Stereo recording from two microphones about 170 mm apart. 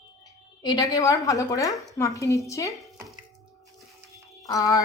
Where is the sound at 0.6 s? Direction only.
20° left (ahead or behind).